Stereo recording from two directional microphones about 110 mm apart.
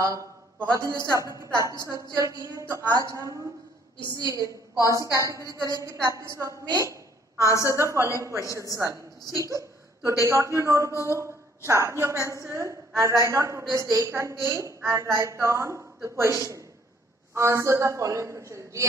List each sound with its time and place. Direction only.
0.0 s a woman's voice: 30° right (ahead or behind)
6.6 s a sound: 35° right (ahead or behind)
7.4 s a woman's voice: 30° left (ahead or behind)
7.7 s a woman's voice: 25° right (ahead or behind)
9.4 s a sound: 30° right (ahead or behind)
10.2 s a woman's voice: 25° right (ahead or behind)